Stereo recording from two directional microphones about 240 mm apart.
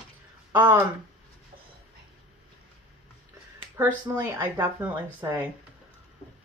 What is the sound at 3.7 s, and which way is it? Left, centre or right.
Speech, centre.